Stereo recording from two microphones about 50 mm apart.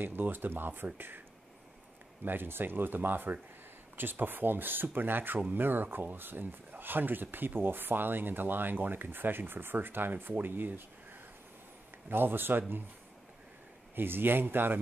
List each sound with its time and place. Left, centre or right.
0.0 s speech: right
2.2 s speech: right
12.1 s speech: right
13.9 s speech: right